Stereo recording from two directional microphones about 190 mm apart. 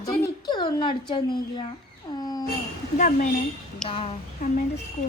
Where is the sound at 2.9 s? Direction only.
45° left (ahead or behind).